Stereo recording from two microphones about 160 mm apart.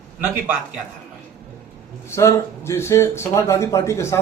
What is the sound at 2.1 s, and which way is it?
Speech, 15° left (ahead or behind).